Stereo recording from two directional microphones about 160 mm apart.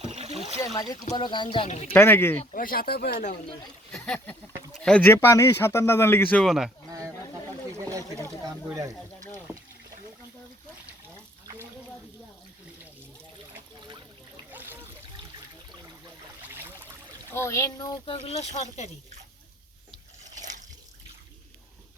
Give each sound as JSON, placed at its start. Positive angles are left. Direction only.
{"t": 0.1, "sound": "a sound", "side_deg": -40}
{"t": 0.6, "sound": "speech", "side_deg": 20}
{"t": 1.9, "sound": "speech", "side_deg": 15}
{"t": 2.5, "sound": "speech", "side_deg": 65}
{"t": 3.9, "sound": "speech", "side_deg": 5}
{"t": 8.6, "sound": "speech", "side_deg": -20}
{"t": 11.4, "sound": "a sound", "side_deg": -20}
{"t": 14.5, "sound": "a sound", "side_deg": -10}
{"t": 17.3, "sound": "speech", "side_deg": 15}
{"t": 20.3, "sound": "water", "side_deg": -50}